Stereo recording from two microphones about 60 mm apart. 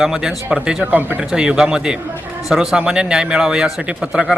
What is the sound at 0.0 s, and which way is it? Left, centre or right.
Speech, centre.